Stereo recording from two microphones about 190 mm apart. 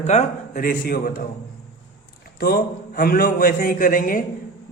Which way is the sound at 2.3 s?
55° left (ahead or behind).